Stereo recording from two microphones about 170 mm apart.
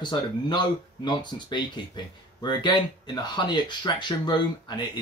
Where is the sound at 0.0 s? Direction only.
25° left (ahead or behind).